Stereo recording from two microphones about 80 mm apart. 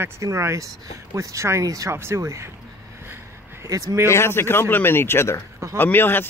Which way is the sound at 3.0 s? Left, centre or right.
Right.